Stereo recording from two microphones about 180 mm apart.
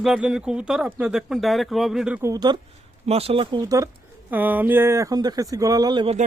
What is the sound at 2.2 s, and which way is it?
Speech, 20° right (ahead or behind).